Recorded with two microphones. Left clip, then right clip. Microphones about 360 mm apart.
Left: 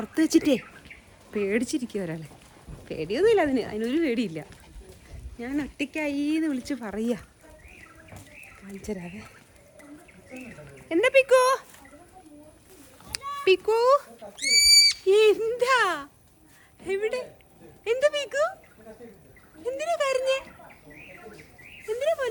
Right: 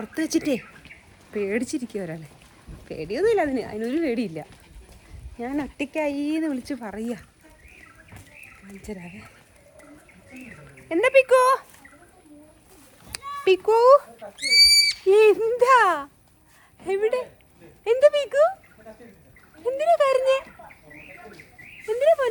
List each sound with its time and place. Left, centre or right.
0.0 s speech: centre
8.6 s speech: centre
10.8 s speech: centre
13.1 s fowl: centre
15.0 s a child's voice: centre
19.6 s a child's voice: centre
21.8 s a sound: centre